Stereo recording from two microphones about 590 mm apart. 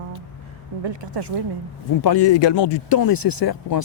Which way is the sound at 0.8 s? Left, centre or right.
Right.